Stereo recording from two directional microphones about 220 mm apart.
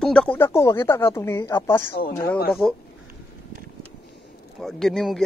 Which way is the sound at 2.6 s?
5° left (ahead or behind).